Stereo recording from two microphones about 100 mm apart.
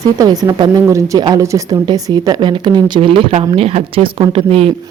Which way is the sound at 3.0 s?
60° right (ahead or behind).